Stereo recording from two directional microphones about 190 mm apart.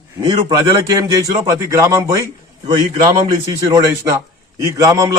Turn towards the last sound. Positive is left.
turn(degrees=-15)  # may be behind; listen again after turning